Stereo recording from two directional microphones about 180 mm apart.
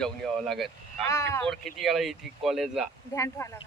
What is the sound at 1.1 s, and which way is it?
Speech, 15° left (ahead or behind).